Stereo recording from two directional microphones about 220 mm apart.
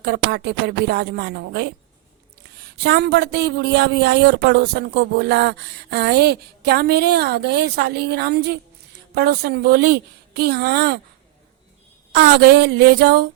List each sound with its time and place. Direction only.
0.0 s speech: 45° right (ahead or behind)
2.8 s speech: 50° right (ahead or behind)
12.1 s speech: 50° right (ahead or behind)